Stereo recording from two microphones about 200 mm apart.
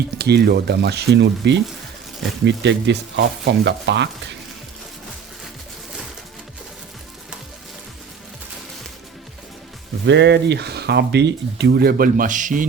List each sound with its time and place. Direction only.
0.2 s speech: 55° right (ahead or behind)
10.1 s speech: 60° right (ahead or behind); by 12.6 s 40° right (ahead or behind)